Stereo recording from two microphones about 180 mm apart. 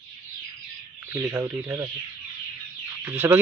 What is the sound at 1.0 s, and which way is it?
Speech, 10° right (ahead or behind).